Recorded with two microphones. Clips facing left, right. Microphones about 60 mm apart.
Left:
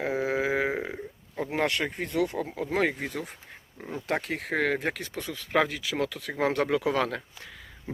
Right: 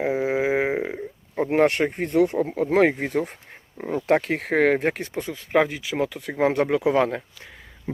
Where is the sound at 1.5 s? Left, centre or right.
Right.